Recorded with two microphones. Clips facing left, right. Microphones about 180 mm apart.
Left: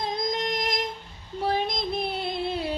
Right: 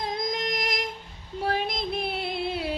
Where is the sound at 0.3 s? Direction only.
35° left (ahead or behind).